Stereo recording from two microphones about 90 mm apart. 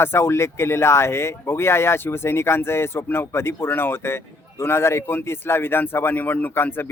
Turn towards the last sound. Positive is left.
turn(degrees=25)  # may be behind; listen again after turning